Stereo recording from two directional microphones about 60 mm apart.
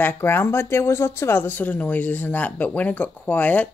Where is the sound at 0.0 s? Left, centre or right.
Left.